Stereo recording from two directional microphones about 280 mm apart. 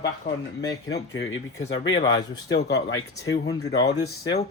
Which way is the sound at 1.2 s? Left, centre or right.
Left.